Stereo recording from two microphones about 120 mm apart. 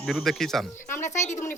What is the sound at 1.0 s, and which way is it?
Speech, 80° left.